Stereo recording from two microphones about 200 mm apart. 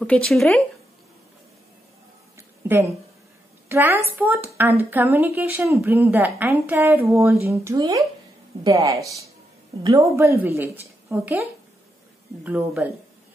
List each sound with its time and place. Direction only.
0.0 s speech: 5° left (ahead or behind)
2.3 s a sound: 15° right (ahead or behind)
3.6 s a woman's voice: 10° right (ahead or behind)
12.4 s a woman's voice: 10° right (ahead or behind)